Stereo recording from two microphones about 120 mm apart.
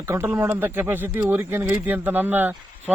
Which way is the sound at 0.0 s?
20° right (ahead or behind).